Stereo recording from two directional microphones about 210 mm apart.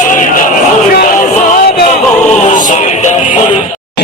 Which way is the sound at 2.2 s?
35° left (ahead or behind).